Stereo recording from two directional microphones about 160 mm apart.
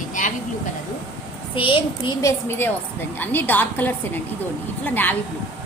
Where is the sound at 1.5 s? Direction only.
30° left (ahead or behind).